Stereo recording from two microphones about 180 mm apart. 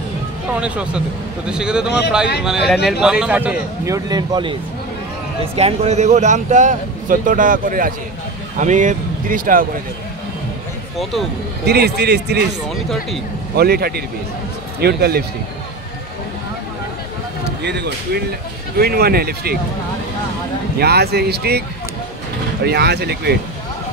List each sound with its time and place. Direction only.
0.5 s a man's voice: 5° right (ahead or behind); by 4.6 s 25° right (ahead or behind)
5.6 s speech: 35° right (ahead or behind); by 9.7 s 50° right (ahead or behind)
11.6 s a man's voice: 65° right (ahead or behind)
12.6 s a man's voice: centre (ahead or behind)
13.6 s a man's voice: 60° right (ahead or behind)
17.6 s a man's voice: 70° right (ahead or behind)
20.8 s a man's voice: 65° right (ahead or behind)